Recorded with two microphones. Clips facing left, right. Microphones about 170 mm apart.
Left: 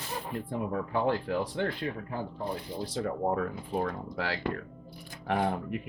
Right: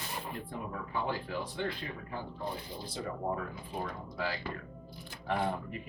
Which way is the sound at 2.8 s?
85° left.